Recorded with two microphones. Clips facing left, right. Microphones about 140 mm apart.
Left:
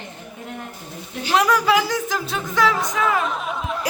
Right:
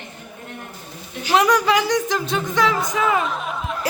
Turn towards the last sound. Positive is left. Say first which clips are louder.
# even
turn(degrees=0)  # may be behind; listen again after turning